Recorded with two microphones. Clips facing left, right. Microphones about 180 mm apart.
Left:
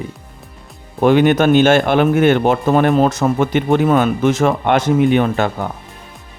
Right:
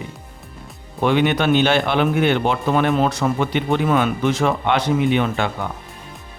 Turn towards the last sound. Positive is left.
turn(degrees=40)  # may be behind; listen again after turning